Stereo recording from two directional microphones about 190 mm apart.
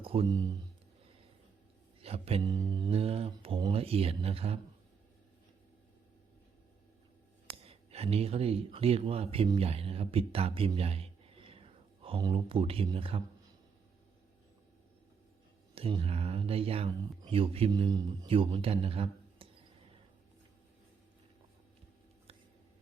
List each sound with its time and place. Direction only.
0.0 s speech: 30° right (ahead or behind)
2.0 s speech: 30° right (ahead or behind)
2.4 s speech: 20° right (ahead or behind)
7.6 s speech: 30° right (ahead or behind)
15.7 s speech: 30° right (ahead or behind)